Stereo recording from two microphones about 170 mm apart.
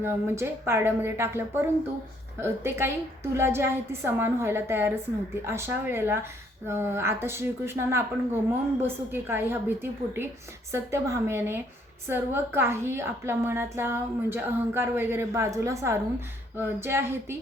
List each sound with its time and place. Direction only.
0.0 s a woman's voice: 15° right (ahead or behind)